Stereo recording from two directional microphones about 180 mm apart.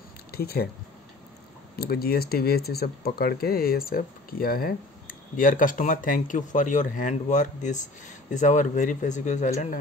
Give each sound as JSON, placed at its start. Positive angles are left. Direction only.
{"t": 0.3, "sound": "speech", "side_deg": 60}
{"t": 1.8, "sound": "speech", "side_deg": 55}